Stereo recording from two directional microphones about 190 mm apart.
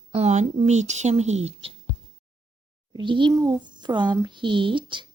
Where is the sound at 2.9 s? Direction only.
25° right (ahead or behind).